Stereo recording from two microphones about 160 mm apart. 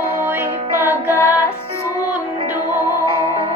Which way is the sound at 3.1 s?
35° right (ahead or behind).